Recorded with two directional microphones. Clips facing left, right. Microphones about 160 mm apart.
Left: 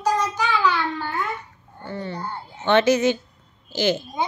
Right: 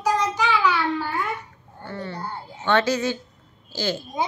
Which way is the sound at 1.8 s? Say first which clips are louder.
Left 2 dB; 15° left (ahead or behind).